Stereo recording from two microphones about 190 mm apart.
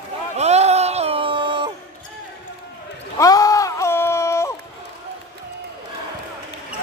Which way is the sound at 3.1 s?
20° left (ahead or behind).